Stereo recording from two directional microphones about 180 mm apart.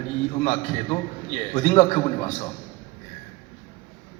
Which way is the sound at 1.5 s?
30° left (ahead or behind).